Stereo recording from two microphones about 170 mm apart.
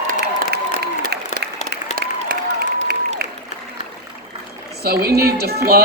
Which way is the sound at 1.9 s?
65° right (ahead or behind).